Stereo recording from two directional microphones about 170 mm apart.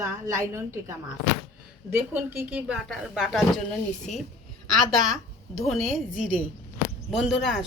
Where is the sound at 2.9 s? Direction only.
Centre (ahead or behind).